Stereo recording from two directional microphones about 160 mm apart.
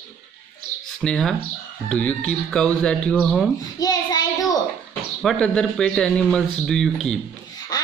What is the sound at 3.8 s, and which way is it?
Child singing, 25° left (ahead or behind).